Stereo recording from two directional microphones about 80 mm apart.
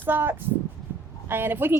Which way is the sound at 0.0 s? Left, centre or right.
Right.